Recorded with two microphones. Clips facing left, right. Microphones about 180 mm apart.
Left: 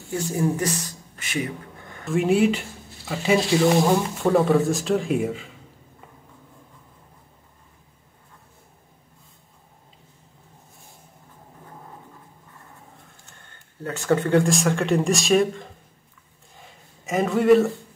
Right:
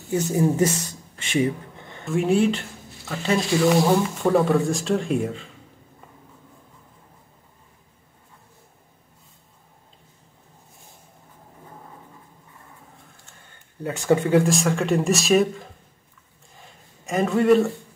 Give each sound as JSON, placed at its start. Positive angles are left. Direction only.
{"t": 0.1, "sound": "speech", "side_deg": -20}
{"t": 2.0, "sound": "speech", "side_deg": 0}
{"t": 13.8, "sound": "speech", "side_deg": -15}
{"t": 16.5, "sound": "a sound", "side_deg": 0}